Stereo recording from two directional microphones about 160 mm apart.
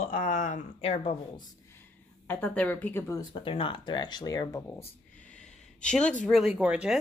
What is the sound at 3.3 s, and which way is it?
Speech, 35° left (ahead or behind).